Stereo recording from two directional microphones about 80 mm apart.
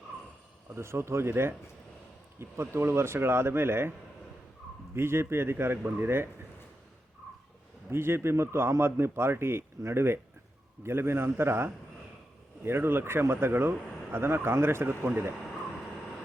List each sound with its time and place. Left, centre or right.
0.7 s speech: right
4.9 s speech: right
7.9 s speech: right